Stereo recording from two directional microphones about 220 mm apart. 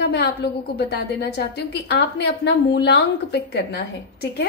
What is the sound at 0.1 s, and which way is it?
A woman's voice, 50° left (ahead or behind).